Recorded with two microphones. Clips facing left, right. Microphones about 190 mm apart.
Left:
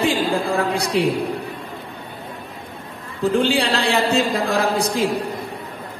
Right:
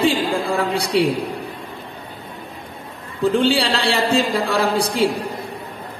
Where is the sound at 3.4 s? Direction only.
30° right (ahead or behind).